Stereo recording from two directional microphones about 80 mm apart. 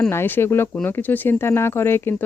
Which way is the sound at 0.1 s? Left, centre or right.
Left.